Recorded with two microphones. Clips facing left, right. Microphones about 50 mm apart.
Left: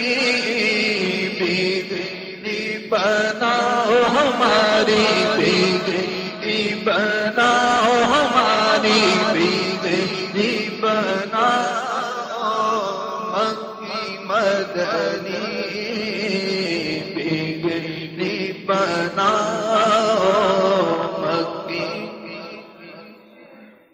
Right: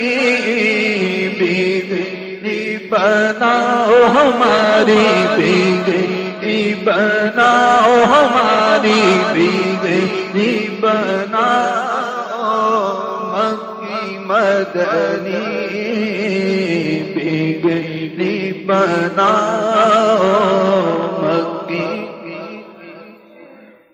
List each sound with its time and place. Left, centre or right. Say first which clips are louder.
0.0 s music: right 5 dB; right